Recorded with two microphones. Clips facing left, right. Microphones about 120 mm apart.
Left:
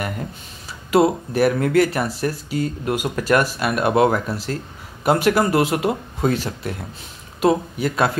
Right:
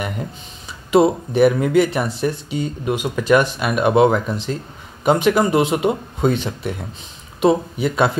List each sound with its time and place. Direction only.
0.9 s speech: centre (ahead or behind)